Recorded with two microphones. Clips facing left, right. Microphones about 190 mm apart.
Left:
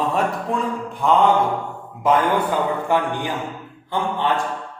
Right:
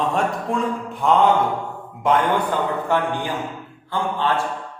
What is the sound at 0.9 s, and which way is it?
A man's voice, centre (ahead or behind).